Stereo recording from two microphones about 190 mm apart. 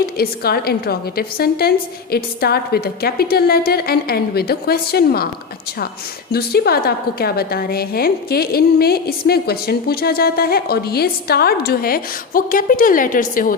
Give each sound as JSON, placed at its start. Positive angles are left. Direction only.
{"t": 0.0, "sound": "a woman's voice", "side_deg": 55}
{"t": 6.3, "sound": "a woman's voice", "side_deg": 55}